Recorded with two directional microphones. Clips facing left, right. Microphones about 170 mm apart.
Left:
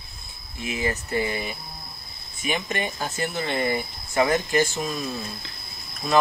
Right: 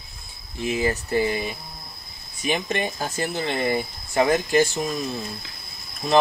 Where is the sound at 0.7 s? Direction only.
35° right (ahead or behind).